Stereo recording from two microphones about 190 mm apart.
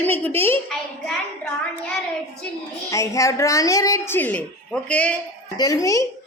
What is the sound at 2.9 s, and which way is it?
Music, 15° left (ahead or behind).